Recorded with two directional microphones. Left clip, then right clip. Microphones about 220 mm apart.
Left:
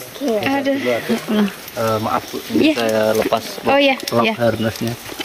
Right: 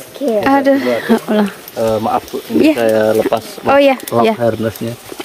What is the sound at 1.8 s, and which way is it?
Speech, 40° right (ahead or behind).